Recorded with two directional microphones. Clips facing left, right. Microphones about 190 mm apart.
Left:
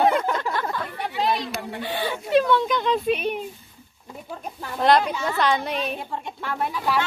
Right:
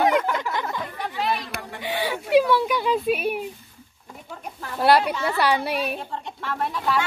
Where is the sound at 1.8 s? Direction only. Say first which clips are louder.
Right 2 dB; 15° right (ahead or behind).